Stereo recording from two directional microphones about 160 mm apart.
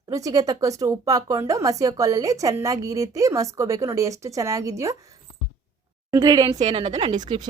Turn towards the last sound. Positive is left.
turn(degrees=-25)  # may be behind; listen again after turning